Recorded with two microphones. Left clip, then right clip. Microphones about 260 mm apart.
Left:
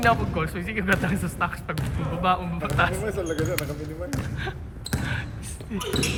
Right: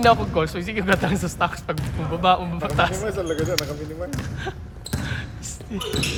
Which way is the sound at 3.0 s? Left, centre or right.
Right.